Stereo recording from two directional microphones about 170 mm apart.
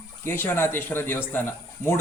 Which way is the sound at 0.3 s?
10° left (ahead or behind).